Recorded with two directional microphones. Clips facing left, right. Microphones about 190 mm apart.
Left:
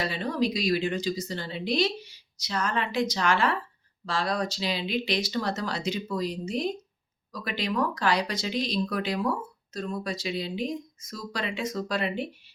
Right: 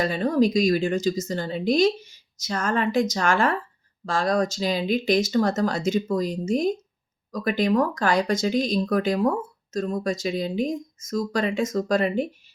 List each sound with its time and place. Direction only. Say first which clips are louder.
0.0 s speech: right 7 dB; 45° right (ahead or behind)